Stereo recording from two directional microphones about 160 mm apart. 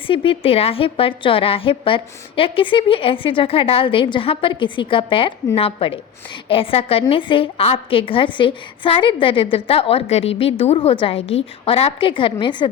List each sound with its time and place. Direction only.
0.1 s a woman's voice: 35° left (ahead or behind)